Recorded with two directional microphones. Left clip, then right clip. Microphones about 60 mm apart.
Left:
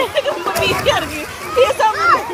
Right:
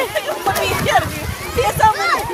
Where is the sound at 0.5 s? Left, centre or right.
Left.